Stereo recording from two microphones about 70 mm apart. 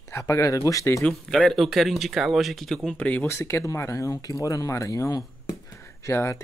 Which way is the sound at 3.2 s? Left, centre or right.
Left.